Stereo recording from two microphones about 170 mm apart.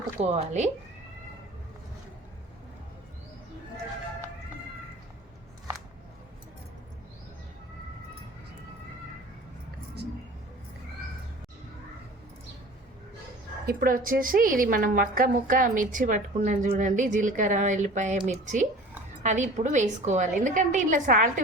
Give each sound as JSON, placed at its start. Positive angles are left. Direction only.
{"t": 0.2, "sound": "speech", "side_deg": -40}
{"t": 13.7, "sound": "a woman's voice", "side_deg": -55}